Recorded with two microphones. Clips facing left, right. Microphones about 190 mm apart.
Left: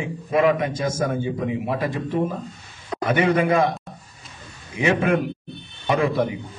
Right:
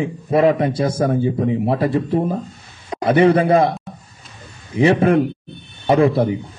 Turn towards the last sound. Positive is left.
turn(degrees=-35)  # may be behind; listen again after turning